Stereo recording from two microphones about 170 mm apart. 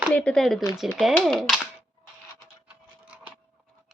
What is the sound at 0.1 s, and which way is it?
Speech, 5° left (ahead or behind).